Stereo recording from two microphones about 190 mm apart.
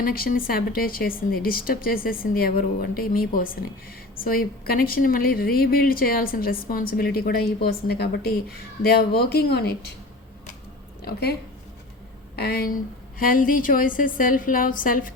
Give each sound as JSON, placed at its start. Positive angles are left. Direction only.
{"t": 0.0, "sound": "a woman's voice", "side_deg": 50}
{"t": 11.0, "sound": "speech", "side_deg": 55}
{"t": 12.4, "sound": "a woman's voice", "side_deg": 55}